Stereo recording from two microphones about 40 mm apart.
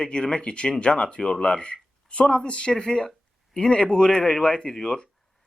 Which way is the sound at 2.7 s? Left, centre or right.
Centre.